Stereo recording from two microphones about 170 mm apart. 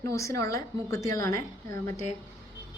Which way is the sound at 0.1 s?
20° left (ahead or behind).